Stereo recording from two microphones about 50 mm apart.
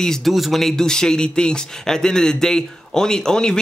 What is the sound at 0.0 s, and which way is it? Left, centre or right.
Speech, centre.